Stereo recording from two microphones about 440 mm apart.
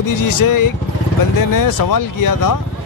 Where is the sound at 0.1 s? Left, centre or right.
Left.